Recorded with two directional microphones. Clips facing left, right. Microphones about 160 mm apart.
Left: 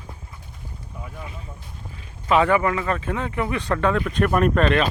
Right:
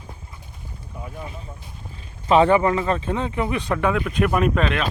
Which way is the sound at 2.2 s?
25° right (ahead or behind).